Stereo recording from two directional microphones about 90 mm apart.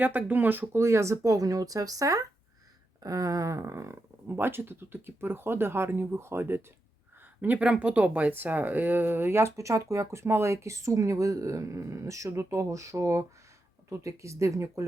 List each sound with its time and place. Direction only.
0.0 s speech: 20° right (ahead or behind)
7.4 s speech: 15° right (ahead or behind); by 14.8 s 35° right (ahead or behind)